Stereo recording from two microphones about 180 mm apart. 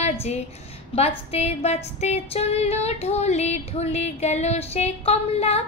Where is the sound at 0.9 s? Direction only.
35° left (ahead or behind).